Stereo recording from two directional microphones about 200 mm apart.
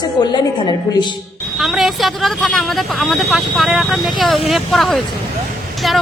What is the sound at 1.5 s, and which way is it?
Speech, centre (ahead or behind).